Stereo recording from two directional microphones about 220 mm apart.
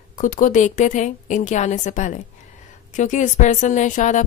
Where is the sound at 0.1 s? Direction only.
35° left (ahead or behind).